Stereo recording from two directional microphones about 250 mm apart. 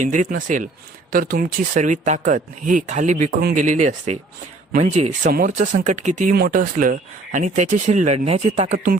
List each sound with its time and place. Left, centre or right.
0.0 s speech: right